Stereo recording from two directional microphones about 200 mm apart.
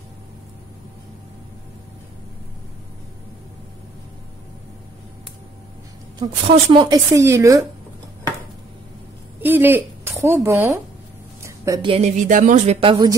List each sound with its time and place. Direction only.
6.1 s a woman's voice: 20° right (ahead or behind)
9.4 s a woman's voice: 10° right (ahead or behind)
11.4 s a sound: 15° right (ahead or behind)
11.8 s speech: 30° right (ahead or behind)
12.8 s speech: 25° right (ahead or behind)